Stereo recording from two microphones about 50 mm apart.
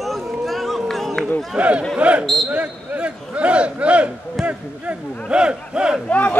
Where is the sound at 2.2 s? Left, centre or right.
Centre.